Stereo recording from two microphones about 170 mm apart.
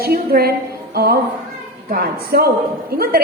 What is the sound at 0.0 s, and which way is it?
A woman's voice, 65° right (ahead or behind).